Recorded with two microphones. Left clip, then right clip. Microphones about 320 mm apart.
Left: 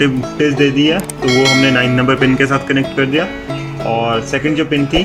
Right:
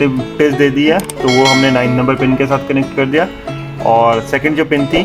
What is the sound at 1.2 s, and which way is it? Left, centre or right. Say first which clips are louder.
Speech: right 1 dB; centre.